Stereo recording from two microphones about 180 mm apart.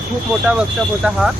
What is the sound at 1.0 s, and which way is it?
Speech, 10° right (ahead or behind).